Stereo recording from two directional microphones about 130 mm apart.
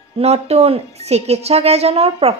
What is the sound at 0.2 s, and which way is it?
Speech, 55° right (ahead or behind).